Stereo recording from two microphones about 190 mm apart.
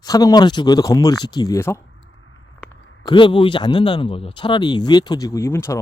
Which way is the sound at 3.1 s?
25° left (ahead or behind).